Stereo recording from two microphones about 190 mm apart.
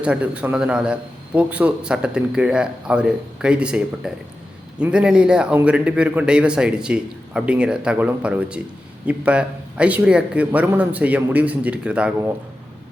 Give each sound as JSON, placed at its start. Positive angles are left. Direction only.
{"t": 0.0, "sound": "a man's voice", "side_deg": -5}